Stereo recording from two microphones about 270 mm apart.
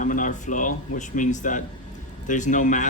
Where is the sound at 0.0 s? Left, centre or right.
Left.